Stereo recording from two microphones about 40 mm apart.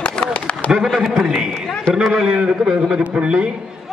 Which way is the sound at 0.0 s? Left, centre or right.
Left.